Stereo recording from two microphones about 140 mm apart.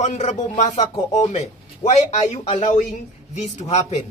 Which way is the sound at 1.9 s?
50° left (ahead or behind).